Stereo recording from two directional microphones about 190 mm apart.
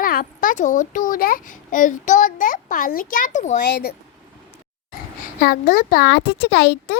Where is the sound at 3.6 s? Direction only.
55° left (ahead or behind).